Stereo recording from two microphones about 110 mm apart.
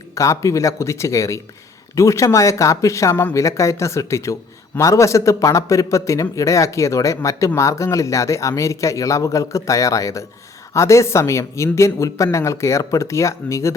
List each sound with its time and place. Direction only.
0.1 s speech: 30° left (ahead or behind)